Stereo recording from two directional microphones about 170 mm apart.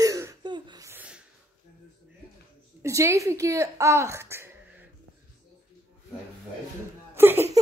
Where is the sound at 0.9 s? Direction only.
10° right (ahead or behind).